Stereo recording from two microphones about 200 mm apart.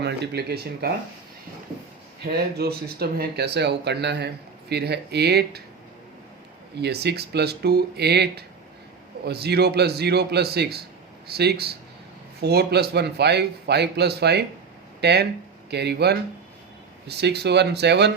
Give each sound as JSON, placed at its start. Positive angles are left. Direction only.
{"t": 0.0, "sound": "a man's voice", "side_deg": -55}
{"t": 2.3, "sound": "a man's voice", "side_deg": -50}
{"t": 6.7, "sound": "a man's voice", "side_deg": -55}